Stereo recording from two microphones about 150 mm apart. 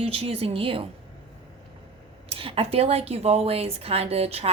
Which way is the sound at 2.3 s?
40° right (ahead or behind).